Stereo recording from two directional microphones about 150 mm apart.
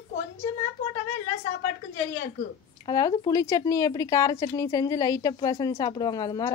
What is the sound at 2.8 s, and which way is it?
Speech, 25° left (ahead or behind).